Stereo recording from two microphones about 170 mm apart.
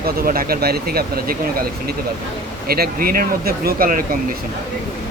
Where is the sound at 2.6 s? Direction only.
65° right (ahead or behind).